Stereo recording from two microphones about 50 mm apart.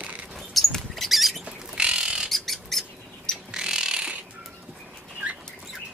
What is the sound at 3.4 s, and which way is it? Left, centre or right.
Bird, centre.